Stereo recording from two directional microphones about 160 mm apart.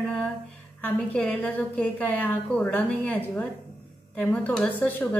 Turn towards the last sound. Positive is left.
turn(degrees=10)  # may be behind; listen again after turning